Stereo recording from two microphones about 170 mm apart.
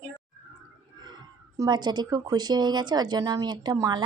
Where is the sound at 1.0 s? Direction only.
25° right (ahead or behind).